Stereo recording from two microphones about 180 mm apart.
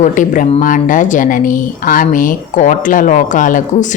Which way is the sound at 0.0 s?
45° left (ahead or behind).